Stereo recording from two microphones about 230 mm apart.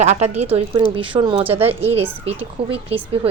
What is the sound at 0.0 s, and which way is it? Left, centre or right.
A woman's voice, right.